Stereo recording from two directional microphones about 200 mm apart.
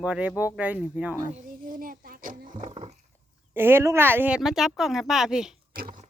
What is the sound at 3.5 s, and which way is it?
Speech, 10° right (ahead or behind).